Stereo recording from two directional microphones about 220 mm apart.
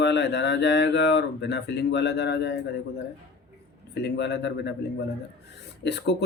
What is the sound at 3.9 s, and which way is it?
Speech, 50° left (ahead or behind).